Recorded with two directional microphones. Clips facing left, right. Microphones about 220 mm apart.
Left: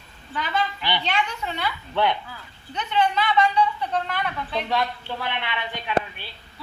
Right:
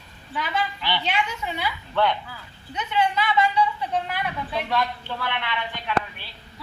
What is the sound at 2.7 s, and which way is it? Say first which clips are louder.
A woman's voice: left 1 dB; 5° right (ahead or behind).